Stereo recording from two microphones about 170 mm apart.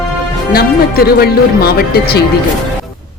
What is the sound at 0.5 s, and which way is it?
Speech, 65° left (ahead or behind).